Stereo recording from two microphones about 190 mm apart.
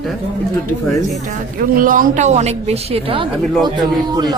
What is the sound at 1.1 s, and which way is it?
A woman's voice, 40° right (ahead or behind).